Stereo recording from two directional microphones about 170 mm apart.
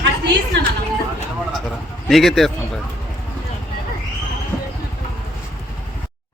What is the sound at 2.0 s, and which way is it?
Speech, centre (ahead or behind).